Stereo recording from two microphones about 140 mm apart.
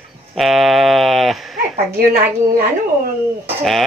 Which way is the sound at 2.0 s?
90° right.